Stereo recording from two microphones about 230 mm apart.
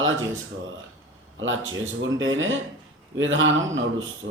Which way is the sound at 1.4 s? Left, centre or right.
Right.